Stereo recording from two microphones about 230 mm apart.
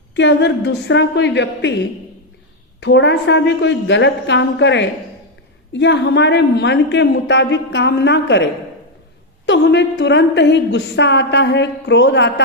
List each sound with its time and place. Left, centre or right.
0.2 s a woman's voice: left
2.8 s a woman's voice: left
9.5 s a woman's voice: left